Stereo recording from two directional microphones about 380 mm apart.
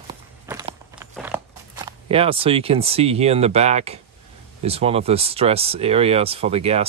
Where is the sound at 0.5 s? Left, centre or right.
Centre.